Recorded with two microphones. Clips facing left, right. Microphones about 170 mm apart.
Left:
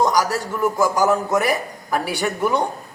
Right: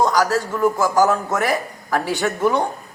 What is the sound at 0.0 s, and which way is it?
Speech, 15° left (ahead or behind).